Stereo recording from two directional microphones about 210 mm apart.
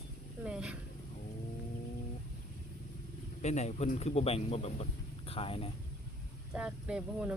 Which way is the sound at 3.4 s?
35° left (ahead or behind).